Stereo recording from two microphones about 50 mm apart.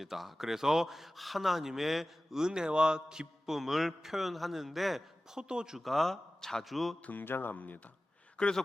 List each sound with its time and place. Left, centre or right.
0.0 s a man's voice: centre
5.4 s speech: centre
5.8 s a man's voice: centre
7.0 s speech: left
7.3 s speech: left
8.4 s a man's voice: centre